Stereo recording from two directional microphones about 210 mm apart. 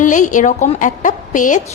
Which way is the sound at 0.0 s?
35° left (ahead or behind).